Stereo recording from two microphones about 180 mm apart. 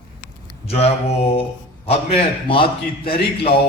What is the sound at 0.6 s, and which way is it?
A man's voice, 35° left (ahead or behind).